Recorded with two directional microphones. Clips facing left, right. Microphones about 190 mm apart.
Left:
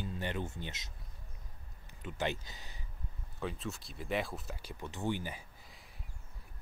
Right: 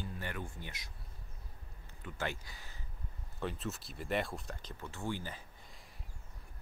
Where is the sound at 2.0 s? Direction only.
20° left (ahead or behind).